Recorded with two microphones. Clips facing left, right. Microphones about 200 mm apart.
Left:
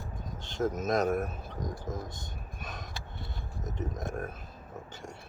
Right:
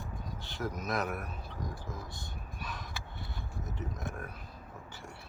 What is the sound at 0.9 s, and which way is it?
Speech, 45° left (ahead or behind).